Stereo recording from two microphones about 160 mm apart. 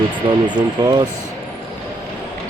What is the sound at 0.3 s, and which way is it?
Speech, 30° right (ahead or behind).